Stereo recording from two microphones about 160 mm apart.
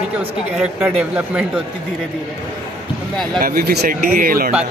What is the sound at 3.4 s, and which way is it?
Speech, 75° right (ahead or behind).